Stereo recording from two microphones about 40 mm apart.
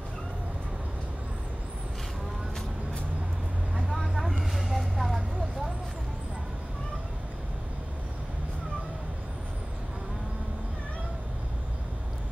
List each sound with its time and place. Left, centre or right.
3.9 s vehicle: centre